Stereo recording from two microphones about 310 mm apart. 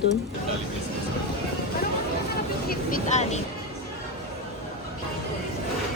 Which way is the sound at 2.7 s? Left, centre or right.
Left.